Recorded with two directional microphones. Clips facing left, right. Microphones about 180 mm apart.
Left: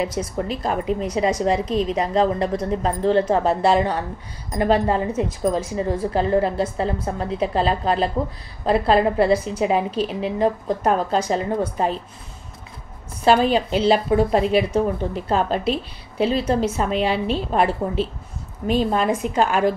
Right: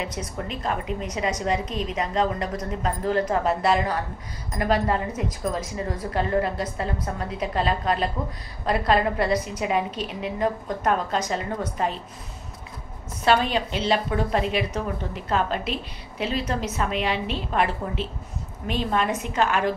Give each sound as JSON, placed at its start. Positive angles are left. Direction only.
{"t": 0.0, "sound": "a woman's voice", "side_deg": 30}
{"t": 13.2, "sound": "a woman's voice", "side_deg": 35}
{"t": 18.7, "sound": "a woman's voice", "side_deg": 35}